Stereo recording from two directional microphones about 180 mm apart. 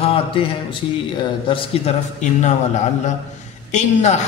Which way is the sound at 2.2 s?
40° left (ahead or behind).